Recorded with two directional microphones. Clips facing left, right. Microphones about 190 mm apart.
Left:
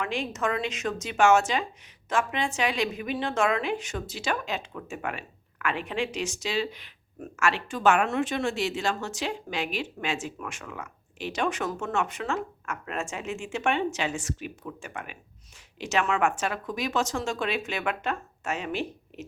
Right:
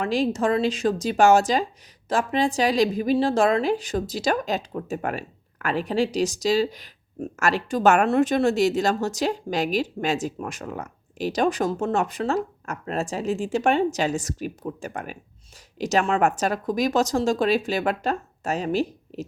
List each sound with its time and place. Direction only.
0.0 s speech: 35° right (ahead or behind)